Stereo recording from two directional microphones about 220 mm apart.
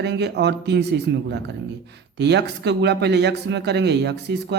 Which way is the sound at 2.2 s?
50° right (ahead or behind).